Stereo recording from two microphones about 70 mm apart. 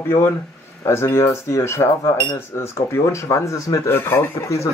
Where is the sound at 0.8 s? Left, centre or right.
Left.